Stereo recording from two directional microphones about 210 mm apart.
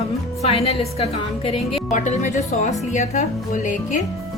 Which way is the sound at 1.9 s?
35° left (ahead or behind).